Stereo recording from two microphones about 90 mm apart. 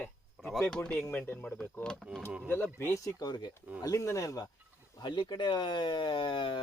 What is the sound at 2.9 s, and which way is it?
Speech, 40° left (ahead or behind).